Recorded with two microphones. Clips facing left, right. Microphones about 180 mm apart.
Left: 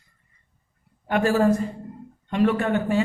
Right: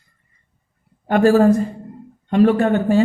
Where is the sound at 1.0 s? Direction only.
40° right (ahead or behind).